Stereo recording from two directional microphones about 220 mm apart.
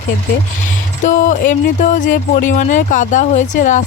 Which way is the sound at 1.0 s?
35° left (ahead or behind).